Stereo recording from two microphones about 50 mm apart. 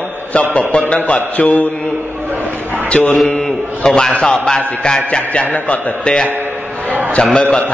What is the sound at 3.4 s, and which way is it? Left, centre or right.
A man's voice, centre.